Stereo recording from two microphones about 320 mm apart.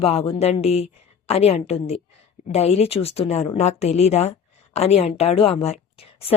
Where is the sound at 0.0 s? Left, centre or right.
Centre.